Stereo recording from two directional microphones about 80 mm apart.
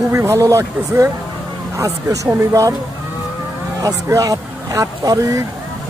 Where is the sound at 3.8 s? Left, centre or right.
Right.